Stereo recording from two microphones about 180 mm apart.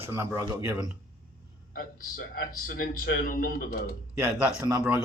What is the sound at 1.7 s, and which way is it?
A man's voice, 55° left (ahead or behind).